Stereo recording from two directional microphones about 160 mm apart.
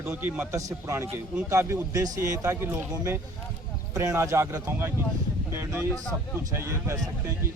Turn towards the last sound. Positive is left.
turn(degrees=-15)  # may be behind; listen again after turning